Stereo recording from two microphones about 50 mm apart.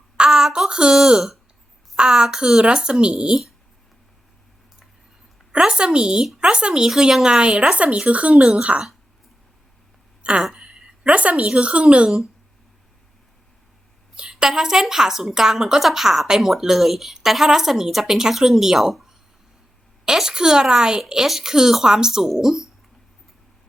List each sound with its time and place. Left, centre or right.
0.2 s a woman's voice: centre
5.5 s a woman's voice: centre
10.5 s speech: centre
14.2 s a woman's voice: centre
20.1 s a woman's voice: centre